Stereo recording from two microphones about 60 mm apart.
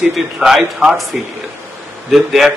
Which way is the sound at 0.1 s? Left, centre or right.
Centre.